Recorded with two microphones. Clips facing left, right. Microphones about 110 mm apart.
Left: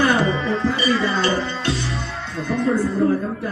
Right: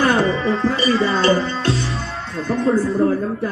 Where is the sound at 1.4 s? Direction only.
35° right (ahead or behind).